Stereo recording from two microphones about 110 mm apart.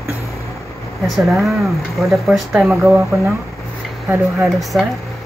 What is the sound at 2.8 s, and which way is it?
Speech, 20° right (ahead or behind).